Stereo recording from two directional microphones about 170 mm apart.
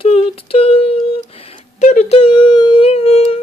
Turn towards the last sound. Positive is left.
turn(degrees=35)  # may be behind; listen again after turning